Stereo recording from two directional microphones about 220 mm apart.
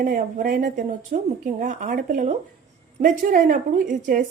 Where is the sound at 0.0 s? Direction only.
35° right (ahead or behind).